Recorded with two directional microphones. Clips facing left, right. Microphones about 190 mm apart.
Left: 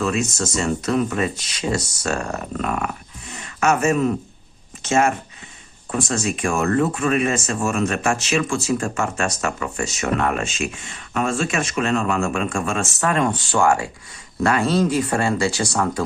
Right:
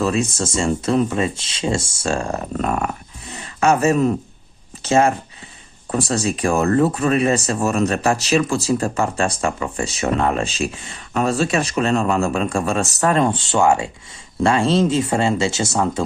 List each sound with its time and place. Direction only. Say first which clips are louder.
0.0 s speech: right 2 dB; 35° right (ahead or behind)